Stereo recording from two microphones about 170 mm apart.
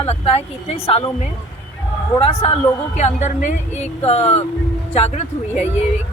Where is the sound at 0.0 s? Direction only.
35° left (ahead or behind).